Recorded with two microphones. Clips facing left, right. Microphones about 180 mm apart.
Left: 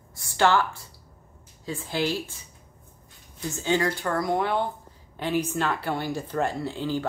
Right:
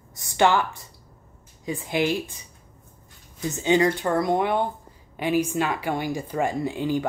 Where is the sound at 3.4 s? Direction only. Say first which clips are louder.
Right 5 dB; 20° right (ahead or behind).